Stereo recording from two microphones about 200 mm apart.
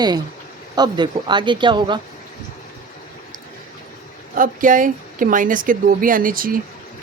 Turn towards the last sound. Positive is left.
turn(degrees=-45)  # may be behind; listen again after turning